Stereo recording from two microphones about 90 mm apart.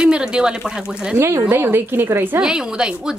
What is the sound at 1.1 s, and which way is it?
A woman's voice, 35° right (ahead or behind).